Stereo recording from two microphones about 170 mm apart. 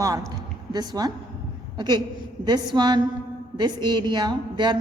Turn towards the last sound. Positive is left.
turn(degrees=-25)  # may be behind; listen again after turning